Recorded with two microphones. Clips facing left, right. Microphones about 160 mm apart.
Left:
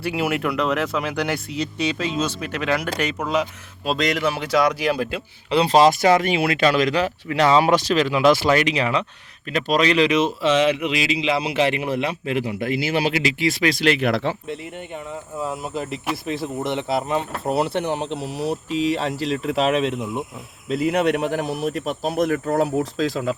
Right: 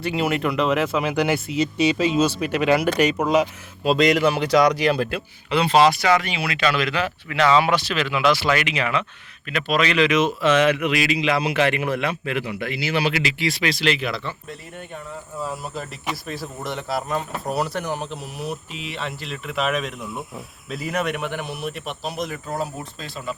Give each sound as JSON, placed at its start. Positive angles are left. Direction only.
{"t": 0.0, "sound": "speech", "side_deg": 10}
{"t": 3.8, "sound": "speech", "side_deg": 0}
{"t": 5.5, "sound": "speech", "side_deg": 35}
{"t": 10.4, "sound": "a sound", "side_deg": -55}
{"t": 11.2, "sound": "speech", "side_deg": 25}
{"t": 14.4, "sound": "speech", "side_deg": 20}